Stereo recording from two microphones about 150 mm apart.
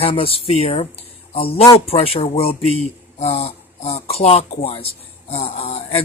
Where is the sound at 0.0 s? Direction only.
40° left (ahead or behind).